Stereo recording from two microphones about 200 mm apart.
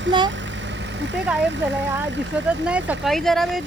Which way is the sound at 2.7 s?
5° right (ahead or behind).